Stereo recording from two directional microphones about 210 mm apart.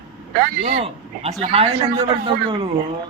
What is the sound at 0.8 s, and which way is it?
A man's voice, 30° right (ahead or behind).